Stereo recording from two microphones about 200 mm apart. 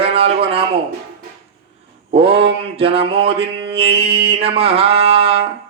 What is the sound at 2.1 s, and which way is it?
Mantra, 30° right (ahead or behind).